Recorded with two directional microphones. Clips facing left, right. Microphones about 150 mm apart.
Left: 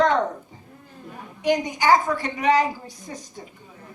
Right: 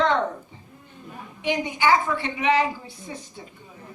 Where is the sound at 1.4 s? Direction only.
40° left (ahead or behind).